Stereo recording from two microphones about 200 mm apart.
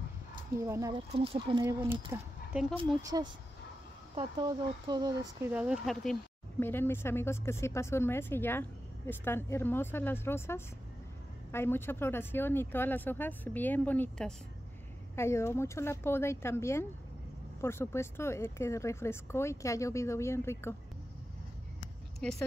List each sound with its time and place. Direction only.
0.6 s speech: 15° right (ahead or behind)
2.5 s speech: 5° right (ahead or behind)
3.0 s speech: 20° right (ahead or behind)
5.5 s speech: 5° right (ahead or behind)
6.6 s speech: 10° left (ahead or behind)
22.2 s speech: 5° left (ahead or behind)